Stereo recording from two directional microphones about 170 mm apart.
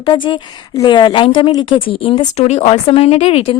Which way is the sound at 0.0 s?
25° left (ahead or behind).